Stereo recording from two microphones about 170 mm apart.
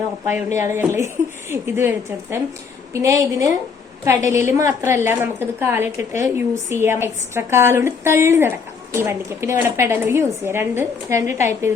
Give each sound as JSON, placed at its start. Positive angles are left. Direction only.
{"t": 0.3, "sound": "a woman's voice", "side_deg": -15}